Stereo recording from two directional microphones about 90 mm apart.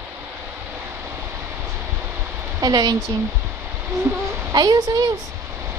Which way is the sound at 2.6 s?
50° right (ahead or behind).